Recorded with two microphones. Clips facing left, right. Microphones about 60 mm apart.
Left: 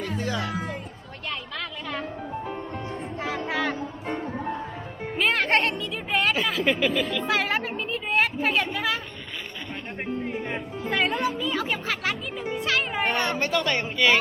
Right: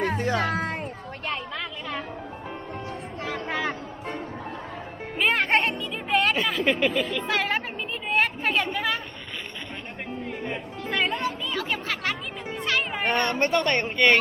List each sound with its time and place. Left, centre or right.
0.0 s music: right
3.2 s music: centre
7.3 s a sound: centre
10.5 s a child's voice: centre